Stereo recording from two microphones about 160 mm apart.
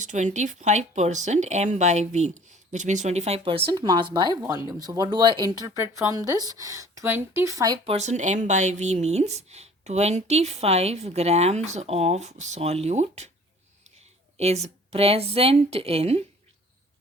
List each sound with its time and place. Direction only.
0.0 s speech: 50° right (ahead or behind)
3.7 s speech: 25° right (ahead or behind)
7.9 s speech: 45° right (ahead or behind)
14.3 s a woman's voice: 40° right (ahead or behind)